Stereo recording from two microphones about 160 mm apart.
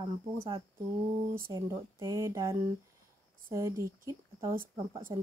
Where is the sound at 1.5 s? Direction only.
20° right (ahead or behind).